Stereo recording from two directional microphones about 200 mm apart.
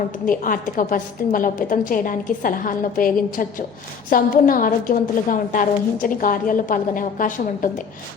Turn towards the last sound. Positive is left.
turn(degrees=40)  # may be behind; listen again after turning